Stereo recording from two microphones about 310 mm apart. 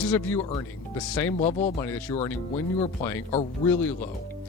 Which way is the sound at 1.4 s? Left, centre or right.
Centre.